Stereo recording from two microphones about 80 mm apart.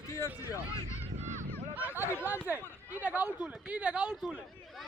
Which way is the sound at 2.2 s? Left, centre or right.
Right.